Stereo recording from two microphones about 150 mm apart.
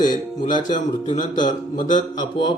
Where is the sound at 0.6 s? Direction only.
55° left (ahead or behind).